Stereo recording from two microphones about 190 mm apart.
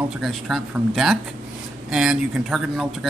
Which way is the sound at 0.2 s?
Centre (ahead or behind).